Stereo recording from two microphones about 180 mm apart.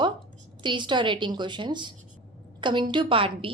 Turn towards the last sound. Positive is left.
turn(degrees=-30)  # may be behind; listen again after turning